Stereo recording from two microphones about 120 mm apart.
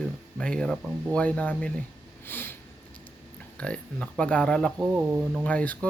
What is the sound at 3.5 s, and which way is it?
Speech, 10° left (ahead or behind).